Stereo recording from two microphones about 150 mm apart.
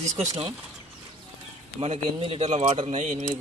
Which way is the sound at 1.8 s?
40° right (ahead or behind).